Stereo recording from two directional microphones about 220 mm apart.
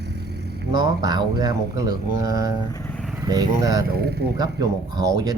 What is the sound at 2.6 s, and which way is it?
Vehicle, 15° left (ahead or behind).